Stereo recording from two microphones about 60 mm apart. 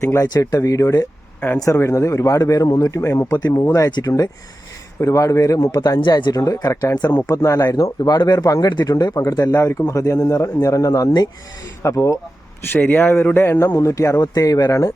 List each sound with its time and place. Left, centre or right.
0.0 s speech: left
0.3 s speech: left
1.7 s speech: left
3.0 s speech: left
3.2 s speech: left
4.9 s speech: left
6.1 s speech: left
10.0 s speech: left
11.8 s speech: left
12.7 s speech: left
13.7 s speech: left